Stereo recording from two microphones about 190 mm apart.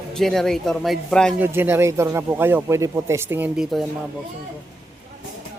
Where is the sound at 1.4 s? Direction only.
10° right (ahead or behind).